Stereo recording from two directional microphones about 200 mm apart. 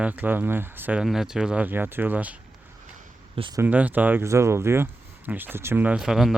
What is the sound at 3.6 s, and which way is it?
Speech, 5° right (ahead or behind).